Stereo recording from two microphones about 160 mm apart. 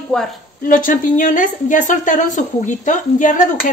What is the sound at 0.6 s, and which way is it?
Speech, 60° left (ahead or behind).